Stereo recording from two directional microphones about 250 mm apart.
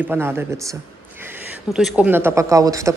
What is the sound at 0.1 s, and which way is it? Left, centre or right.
Speech, centre.